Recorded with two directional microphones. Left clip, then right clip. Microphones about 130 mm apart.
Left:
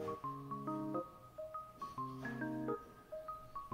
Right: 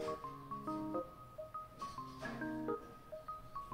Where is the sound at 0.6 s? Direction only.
Centre (ahead or behind).